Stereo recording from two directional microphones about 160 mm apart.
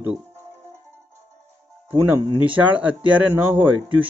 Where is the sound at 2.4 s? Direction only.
10° right (ahead or behind).